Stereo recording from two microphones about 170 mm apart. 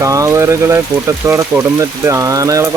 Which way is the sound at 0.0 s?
20° right (ahead or behind).